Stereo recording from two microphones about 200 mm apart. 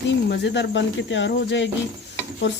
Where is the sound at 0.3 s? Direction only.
60° left (ahead or behind).